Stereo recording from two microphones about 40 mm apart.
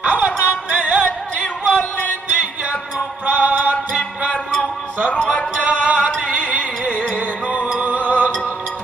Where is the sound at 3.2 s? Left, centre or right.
Right.